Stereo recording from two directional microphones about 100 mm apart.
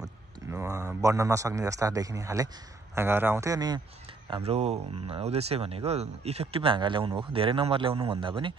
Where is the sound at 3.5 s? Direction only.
40° right (ahead or behind).